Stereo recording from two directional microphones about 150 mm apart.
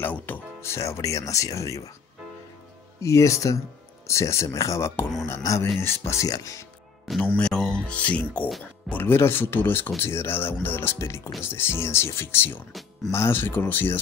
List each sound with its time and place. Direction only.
0.0 s speech: 15° left (ahead or behind)
3.0 s speech: 20° left (ahead or behind)
7.2 s speech: 5° left (ahead or behind)